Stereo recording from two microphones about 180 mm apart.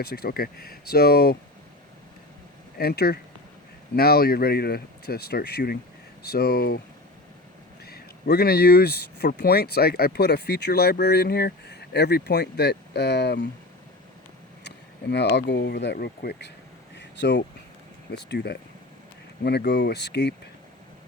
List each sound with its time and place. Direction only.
0.0 s speech: 60° left (ahead or behind)
2.7 s speech: 60° left (ahead or behind)
7.9 s speech: 60° left (ahead or behind)
15.1 s speech: 70° left (ahead or behind)
17.0 s a sound: 75° left (ahead or behind)
18.1 s speech: 70° left (ahead or behind)